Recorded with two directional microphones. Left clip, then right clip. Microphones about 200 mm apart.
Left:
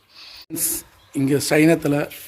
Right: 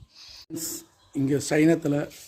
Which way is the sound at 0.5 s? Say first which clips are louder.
Left 6 dB; 5° left (ahead or behind).